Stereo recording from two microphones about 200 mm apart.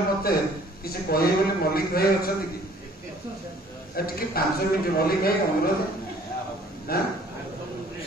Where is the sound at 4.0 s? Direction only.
50° left (ahead or behind).